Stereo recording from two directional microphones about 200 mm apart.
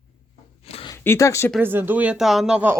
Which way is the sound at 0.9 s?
10° left (ahead or behind).